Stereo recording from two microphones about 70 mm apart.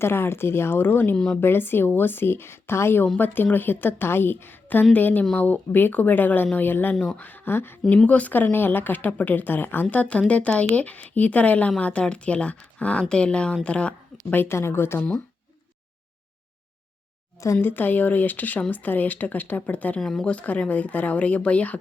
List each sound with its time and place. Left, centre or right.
0.0 s speech: left
1.1 s speech: centre
1.4 s speech: left
7.9 s a woman's voice: centre
14.4 s speech: left
17.6 s speech: left
20.0 s speech: centre
20.2 s speech: left